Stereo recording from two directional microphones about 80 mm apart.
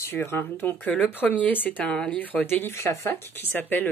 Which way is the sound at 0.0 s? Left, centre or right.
Left.